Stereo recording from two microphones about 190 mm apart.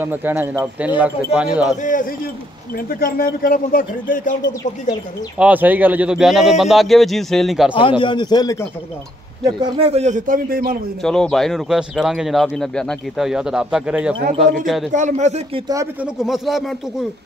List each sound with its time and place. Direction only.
0.0 s speech: 10° right (ahead or behind)
1.8 s speech: 45° left (ahead or behind)
5.4 s speech: 10° right (ahead or behind)
8.0 s a man's voice: 25° left (ahead or behind)
9.4 s a man's voice: 25° right (ahead or behind); by 10.8 s 50° right (ahead or behind)
11.0 s speech: 5° left (ahead or behind)
14.9 s a man's voice: 40° right (ahead or behind)
15.7 s speech: 15° right (ahead or behind)
16.2 s speech: centre (ahead or behind)